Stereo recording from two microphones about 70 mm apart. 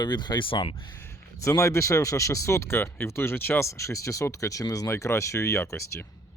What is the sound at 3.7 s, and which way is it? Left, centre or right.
Speech, left.